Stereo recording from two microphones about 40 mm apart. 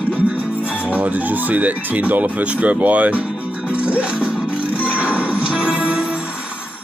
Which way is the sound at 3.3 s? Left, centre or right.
Right.